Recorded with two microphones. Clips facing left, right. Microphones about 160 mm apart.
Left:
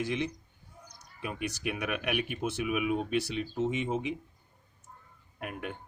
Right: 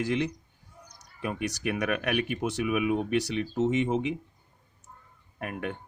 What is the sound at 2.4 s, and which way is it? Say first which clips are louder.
Speech: right 3 dB; 70° right (ahead or behind).